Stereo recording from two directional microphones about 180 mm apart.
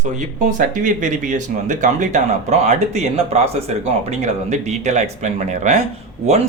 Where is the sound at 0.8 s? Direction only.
45° right (ahead or behind).